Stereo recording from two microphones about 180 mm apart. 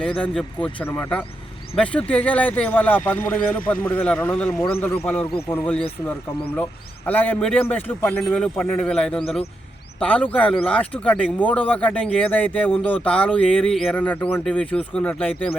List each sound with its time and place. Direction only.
0.2 s a man's voice: 5° left (ahead or behind)